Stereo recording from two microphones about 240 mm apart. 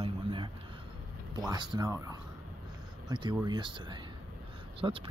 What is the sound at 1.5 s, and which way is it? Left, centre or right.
Speech, centre.